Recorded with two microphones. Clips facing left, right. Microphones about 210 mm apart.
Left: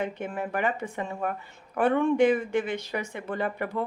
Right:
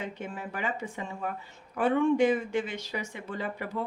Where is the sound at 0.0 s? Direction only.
55° left (ahead or behind).